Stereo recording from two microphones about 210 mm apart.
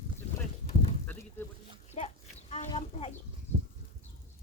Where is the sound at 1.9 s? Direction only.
35° left (ahead or behind).